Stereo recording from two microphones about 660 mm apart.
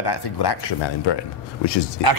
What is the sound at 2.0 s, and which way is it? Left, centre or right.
Speech, right.